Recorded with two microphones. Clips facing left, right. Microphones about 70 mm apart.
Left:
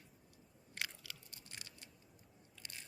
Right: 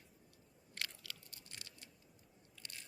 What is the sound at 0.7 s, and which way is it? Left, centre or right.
Crunch, centre.